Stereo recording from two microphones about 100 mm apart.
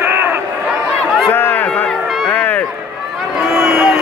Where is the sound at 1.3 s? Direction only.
20° left (ahead or behind).